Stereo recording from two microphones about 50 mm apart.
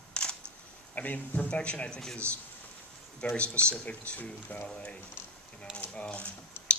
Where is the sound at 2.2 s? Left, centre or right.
Right.